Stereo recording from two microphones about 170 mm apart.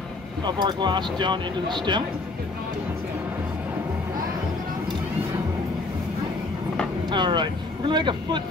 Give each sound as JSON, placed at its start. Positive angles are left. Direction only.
{"t": 0.4, "sound": "speech", "side_deg": -25}
{"t": 7.1, "sound": "speech", "side_deg": -25}